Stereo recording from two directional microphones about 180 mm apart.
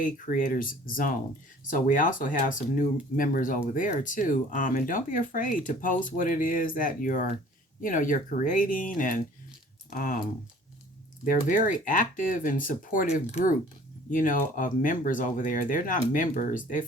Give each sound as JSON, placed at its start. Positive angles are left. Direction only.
{"t": 0.0, "sound": "speech", "side_deg": 50}
{"t": 11.3, "sound": "speech", "side_deg": 50}